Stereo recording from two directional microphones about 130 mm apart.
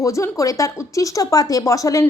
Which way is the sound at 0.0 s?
25° left (ahead or behind).